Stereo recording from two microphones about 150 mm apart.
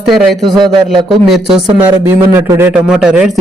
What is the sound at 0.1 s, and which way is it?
Speech, centre (ahead or behind).